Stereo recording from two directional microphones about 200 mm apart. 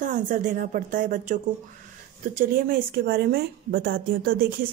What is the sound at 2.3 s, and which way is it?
A woman's voice, 45° right (ahead or behind).